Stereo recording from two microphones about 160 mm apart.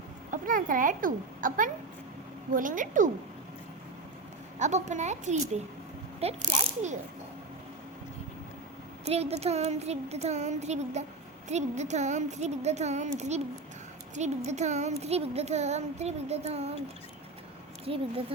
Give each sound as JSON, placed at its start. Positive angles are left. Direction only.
{"t": 0.3, "sound": "a woman's voice", "side_deg": -60}
{"t": 4.6, "sound": "a child's voice", "side_deg": -50}
{"t": 9.0, "sound": "a child's voice", "side_deg": -40}
{"t": 17.8, "sound": "speech", "side_deg": -35}